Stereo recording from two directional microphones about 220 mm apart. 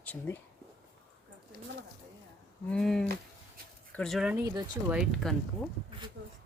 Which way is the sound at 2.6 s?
Centre (ahead or behind).